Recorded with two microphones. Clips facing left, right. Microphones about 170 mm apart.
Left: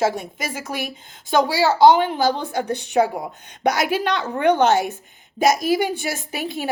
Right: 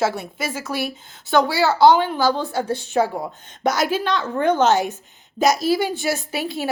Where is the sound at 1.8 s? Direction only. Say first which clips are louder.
Even; 20° left (ahead or behind).